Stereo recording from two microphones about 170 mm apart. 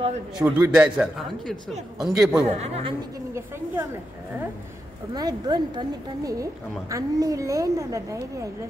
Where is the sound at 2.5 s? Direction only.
40° right (ahead or behind).